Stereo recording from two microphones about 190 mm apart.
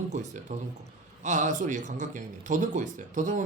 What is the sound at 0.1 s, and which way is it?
A man's voice, 40° right (ahead or behind).